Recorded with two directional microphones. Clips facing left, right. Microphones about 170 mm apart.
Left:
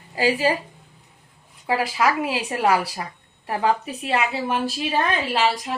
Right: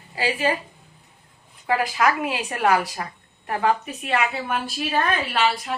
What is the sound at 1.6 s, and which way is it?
A woman's voice, 30° left (ahead or behind).